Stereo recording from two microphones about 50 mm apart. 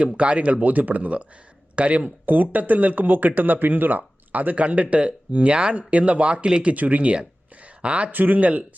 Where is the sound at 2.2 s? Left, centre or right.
Right.